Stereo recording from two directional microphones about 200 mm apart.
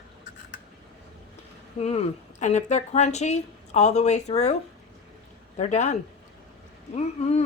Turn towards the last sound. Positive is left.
turn(degrees=35)  # may be behind; listen again after turning